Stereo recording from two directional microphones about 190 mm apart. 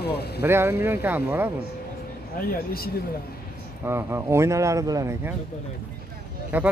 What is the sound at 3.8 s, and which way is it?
Speech, 15° right (ahead or behind).